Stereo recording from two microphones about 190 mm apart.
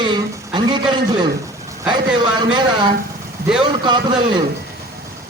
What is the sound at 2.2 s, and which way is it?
A man's voice, 25° right (ahead or behind).